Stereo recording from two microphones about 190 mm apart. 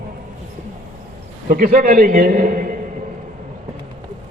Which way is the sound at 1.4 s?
50° right (ahead or behind).